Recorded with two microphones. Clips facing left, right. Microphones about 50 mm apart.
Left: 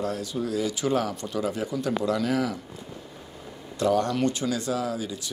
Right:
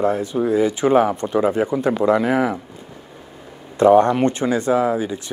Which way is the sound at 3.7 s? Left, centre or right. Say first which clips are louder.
Right 11 dB; right.